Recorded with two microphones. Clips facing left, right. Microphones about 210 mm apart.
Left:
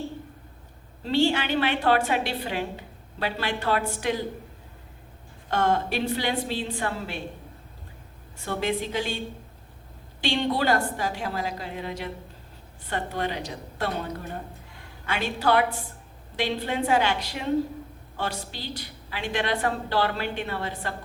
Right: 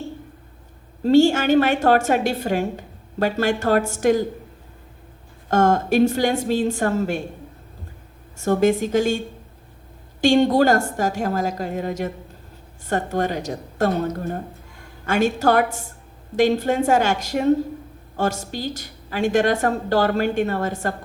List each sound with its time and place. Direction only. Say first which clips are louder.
1.0 s a woman's voice: right 9 dB; 45° right (ahead or behind)
5.5 s a woman's voice: right 7 dB; 45° right (ahead or behind)
8.4 s a woman's voice: right 10 dB; 45° right (ahead or behind)